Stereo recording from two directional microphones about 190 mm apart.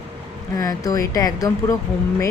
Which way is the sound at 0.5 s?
20° left (ahead or behind).